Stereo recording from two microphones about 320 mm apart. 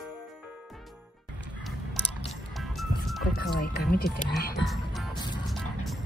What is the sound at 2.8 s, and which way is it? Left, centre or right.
Music, centre.